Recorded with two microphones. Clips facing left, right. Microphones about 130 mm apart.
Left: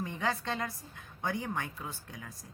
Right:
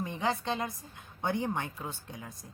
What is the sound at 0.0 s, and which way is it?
A woman's voice, 20° right (ahead or behind).